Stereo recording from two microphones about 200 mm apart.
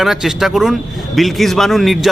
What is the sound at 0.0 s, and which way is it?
A man's voice, centre (ahead or behind).